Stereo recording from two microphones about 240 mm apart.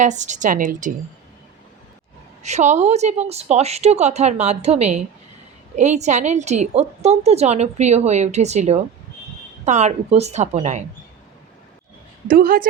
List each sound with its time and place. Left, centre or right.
0.0 s a woman's voice: right
2.4 s a woman's voice: right
12.3 s a woman's voice: right